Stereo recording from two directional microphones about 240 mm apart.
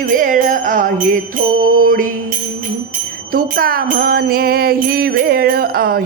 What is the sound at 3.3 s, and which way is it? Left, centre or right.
Jingle bell, right.